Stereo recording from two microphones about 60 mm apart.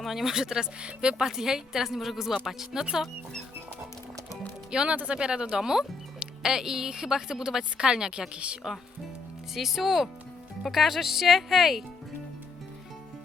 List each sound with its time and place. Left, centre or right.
0.0 s speech: centre
4.7 s speech: centre
9.6 s speech: centre